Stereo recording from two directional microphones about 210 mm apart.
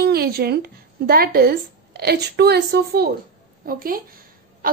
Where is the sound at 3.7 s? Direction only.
45° right (ahead or behind).